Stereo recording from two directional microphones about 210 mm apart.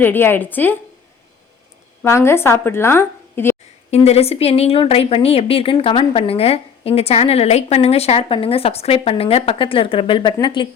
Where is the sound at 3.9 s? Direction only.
30° left (ahead or behind).